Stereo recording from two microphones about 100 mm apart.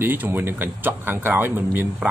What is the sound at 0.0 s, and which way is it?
Speech, 20° right (ahead or behind).